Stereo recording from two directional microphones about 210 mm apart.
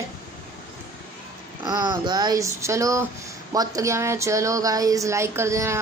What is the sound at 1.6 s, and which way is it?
Speech, 20° right (ahead or behind).